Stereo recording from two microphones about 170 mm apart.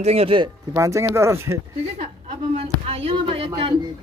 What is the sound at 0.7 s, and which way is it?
Speech, 20° right (ahead or behind).